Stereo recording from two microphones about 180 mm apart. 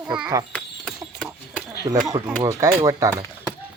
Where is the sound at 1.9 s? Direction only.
15° right (ahead or behind).